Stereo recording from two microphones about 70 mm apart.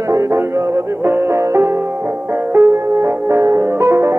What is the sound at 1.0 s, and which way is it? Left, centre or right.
Music, right.